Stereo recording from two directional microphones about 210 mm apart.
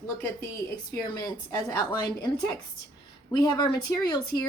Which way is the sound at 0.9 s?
15° left (ahead or behind).